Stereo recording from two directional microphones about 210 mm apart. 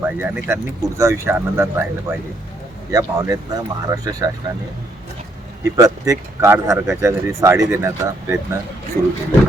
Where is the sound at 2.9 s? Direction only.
15° right (ahead or behind).